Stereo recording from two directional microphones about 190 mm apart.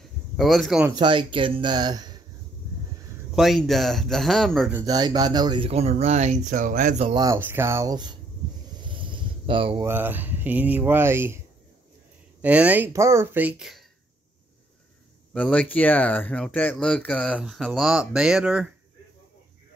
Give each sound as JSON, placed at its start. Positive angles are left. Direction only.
{"t": 0.4, "sound": "speech", "side_deg": 0}
{"t": 0.9, "sound": "speech", "side_deg": -25}
{"t": 3.3, "sound": "speech", "side_deg": 0}
{"t": 4.7, "sound": "speech", "side_deg": -20}
{"t": 7.2, "sound": "speech", "side_deg": -15}
{"t": 8.8, "sound": "a sound", "side_deg": -25}
{"t": 9.8, "sound": "speech", "side_deg": -10}
{"t": 15.3, "sound": "speech", "side_deg": 5}